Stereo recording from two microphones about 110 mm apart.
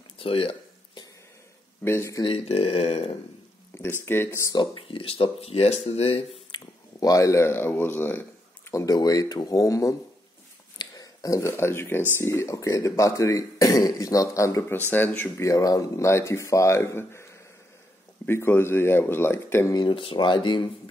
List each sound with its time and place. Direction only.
0.2 s a sound: 60° left (ahead or behind)
1.9 s speech: 25° left (ahead or behind)
2.2 s speech: 60° left (ahead or behind)
4.0 s speech: 20° left (ahead or behind)
4.5 s speech: 40° left (ahead or behind)
4.8 s speech: 55° left (ahead or behind)
6.5 s speech: 35° left (ahead or behind)
8.8 s speech: 35° left (ahead or behind)
19.7 s speech: 45° left (ahead or behind)